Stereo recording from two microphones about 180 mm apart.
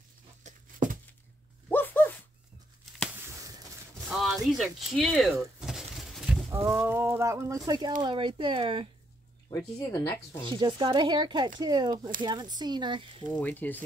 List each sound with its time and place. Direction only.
0.4 s a sound: 45° right (ahead or behind)
1.7 s dog: 10° left (ahead or behind)
3.2 s a sound: 20° right (ahead or behind)
4.1 s speech: centre (ahead or behind)
5.6 s a sound: centre (ahead or behind)
6.5 s speech: 15° right (ahead or behind); by 8.8 s 30° right (ahead or behind)
9.8 s speech: 15° left (ahead or behind)
10.4 s speech: 25° right (ahead or behind)
13.4 s speech: 10° left (ahead or behind)